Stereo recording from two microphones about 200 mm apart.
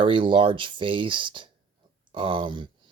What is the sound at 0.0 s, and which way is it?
Speech, 25° right (ahead or behind).